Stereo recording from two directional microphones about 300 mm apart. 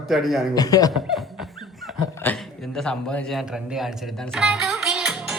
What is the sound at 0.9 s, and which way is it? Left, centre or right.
Beatboxing, centre.